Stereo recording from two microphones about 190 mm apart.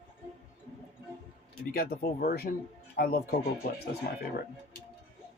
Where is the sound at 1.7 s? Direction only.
55° left (ahead or behind).